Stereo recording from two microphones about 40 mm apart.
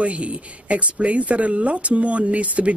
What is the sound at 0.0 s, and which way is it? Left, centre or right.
Speech, right.